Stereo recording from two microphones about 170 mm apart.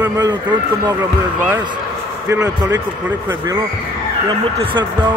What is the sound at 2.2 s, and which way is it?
A man's voice, 15° right (ahead or behind).